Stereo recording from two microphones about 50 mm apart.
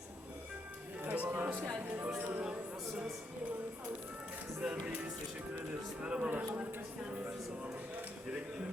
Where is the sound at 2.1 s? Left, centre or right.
Right.